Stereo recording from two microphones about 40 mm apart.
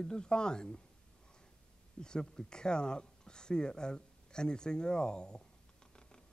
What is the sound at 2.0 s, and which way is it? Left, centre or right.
Speech, centre.